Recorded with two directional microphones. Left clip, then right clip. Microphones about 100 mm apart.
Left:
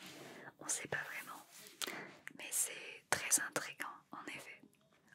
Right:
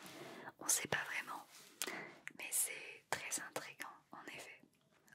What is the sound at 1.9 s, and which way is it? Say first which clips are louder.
Whispering: even; 20° left (ahead or behind).